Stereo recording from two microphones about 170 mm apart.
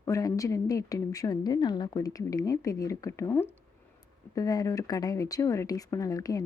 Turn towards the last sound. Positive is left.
turn(degrees=20)  # may be behind; listen again after turning